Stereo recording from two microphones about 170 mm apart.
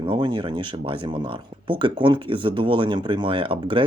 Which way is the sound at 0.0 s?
25° right (ahead or behind).